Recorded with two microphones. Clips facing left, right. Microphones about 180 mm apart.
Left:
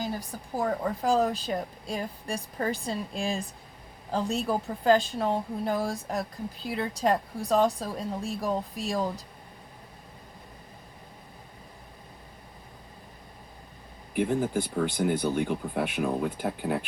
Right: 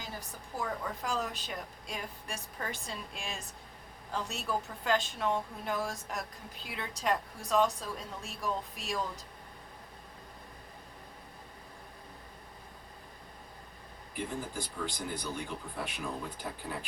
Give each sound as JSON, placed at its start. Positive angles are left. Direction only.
{"t": 0.5, "sound": "a woman's voice", "side_deg": 40}
{"t": 14.1, "sound": "speech", "side_deg": 60}